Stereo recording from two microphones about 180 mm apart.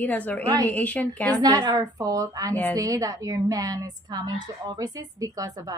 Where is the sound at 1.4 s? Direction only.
25° right (ahead or behind).